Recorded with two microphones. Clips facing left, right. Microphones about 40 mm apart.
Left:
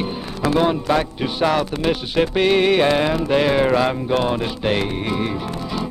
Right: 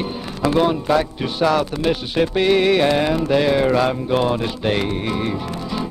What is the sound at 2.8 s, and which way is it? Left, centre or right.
Music, centre.